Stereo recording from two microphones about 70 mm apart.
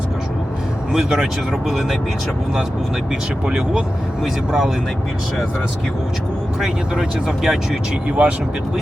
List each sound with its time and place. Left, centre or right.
0.9 s speech: centre
3.4 s speech: centre
6.6 s speech: centre
8.0 s speech: right